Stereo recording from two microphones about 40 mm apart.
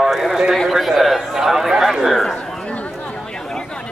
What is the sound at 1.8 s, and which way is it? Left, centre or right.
Chatter, centre.